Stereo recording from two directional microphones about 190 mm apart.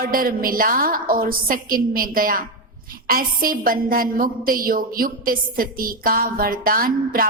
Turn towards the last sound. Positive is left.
turn(degrees=-50)  # may be behind; listen again after turning